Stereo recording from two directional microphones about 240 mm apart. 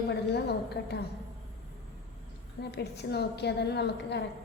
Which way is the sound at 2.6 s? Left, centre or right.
Left.